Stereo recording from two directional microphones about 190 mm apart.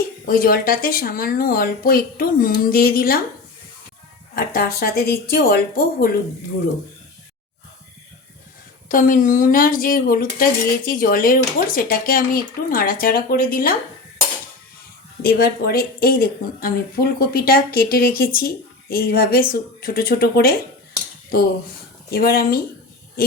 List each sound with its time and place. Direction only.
0.3 s speech: 50° left (ahead or behind)
4.4 s speech: 55° left (ahead or behind)
8.9 s speech: 45° left (ahead or behind)
15.2 s speech: 55° left (ahead or behind)
22.1 s speech: 55° left (ahead or behind)